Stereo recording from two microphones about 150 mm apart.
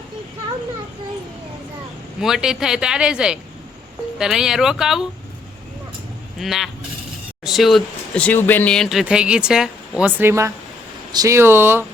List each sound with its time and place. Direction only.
2.2 s speech: 5° right (ahead or behind)
6.4 s speech: centre (ahead or behind)